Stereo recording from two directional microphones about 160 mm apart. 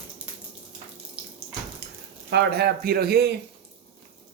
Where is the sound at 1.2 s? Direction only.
10° right (ahead or behind).